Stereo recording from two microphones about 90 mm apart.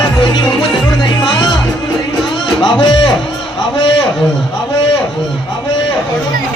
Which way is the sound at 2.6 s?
60° left (ahead or behind).